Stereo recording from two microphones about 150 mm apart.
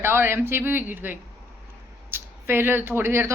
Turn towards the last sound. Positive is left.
turn(degrees=-15)  # may be behind; listen again after turning